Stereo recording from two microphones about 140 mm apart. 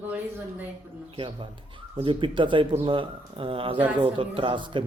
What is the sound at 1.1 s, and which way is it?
A man's voice, 35° right (ahead or behind).